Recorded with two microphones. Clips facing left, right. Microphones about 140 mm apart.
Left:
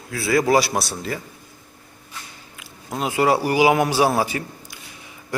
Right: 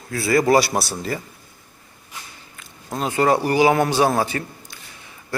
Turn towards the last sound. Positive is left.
turn(degrees=10)  # may be behind; listen again after turning